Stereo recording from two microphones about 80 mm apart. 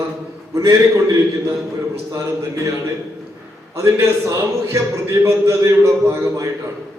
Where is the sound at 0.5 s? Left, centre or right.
Right.